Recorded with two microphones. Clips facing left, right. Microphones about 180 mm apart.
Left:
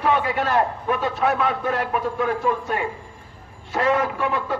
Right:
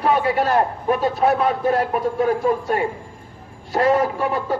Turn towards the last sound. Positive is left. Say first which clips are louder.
# right 2 dB
turn(degrees=-40)  # may be behind; listen again after turning